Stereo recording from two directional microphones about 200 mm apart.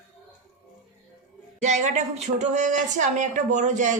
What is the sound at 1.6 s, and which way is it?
Speech, 35° right (ahead or behind).